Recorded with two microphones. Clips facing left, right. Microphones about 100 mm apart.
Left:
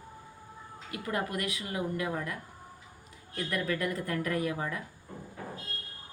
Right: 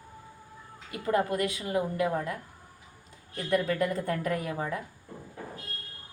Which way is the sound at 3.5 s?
25° right (ahead or behind).